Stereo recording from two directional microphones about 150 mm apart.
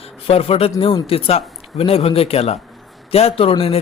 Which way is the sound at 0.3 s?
40° left (ahead or behind).